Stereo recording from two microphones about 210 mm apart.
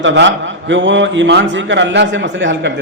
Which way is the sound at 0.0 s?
60° right (ahead or behind).